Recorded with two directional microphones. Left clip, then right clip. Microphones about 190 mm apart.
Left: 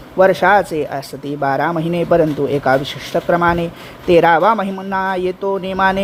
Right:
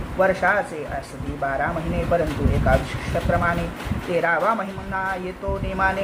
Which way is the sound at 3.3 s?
50° left (ahead or behind).